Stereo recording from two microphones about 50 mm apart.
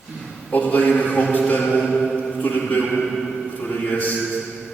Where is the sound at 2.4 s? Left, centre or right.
Left.